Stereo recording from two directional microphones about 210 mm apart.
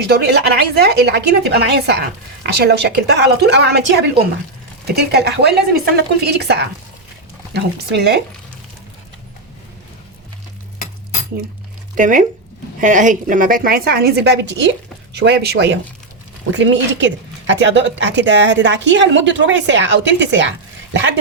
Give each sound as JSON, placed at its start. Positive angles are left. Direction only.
{"t": 0.0, "sound": "a woman's voice", "side_deg": -50}
{"t": 4.9, "sound": "a woman's voice", "side_deg": -50}
{"t": 11.9, "sound": "a woman's voice", "side_deg": -40}